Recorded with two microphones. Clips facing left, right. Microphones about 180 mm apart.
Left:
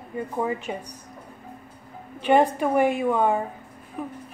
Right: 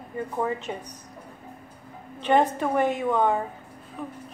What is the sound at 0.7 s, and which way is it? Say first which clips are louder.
Speech: left 2 dB; 10° left (ahead or behind).